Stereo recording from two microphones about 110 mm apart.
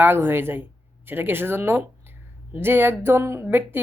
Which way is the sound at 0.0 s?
20° right (ahead or behind).